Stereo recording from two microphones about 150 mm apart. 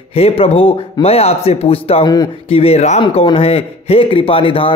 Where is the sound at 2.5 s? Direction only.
40° left (ahead or behind).